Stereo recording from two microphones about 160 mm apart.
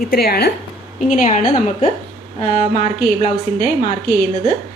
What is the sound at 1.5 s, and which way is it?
Speech, 40° left (ahead or behind).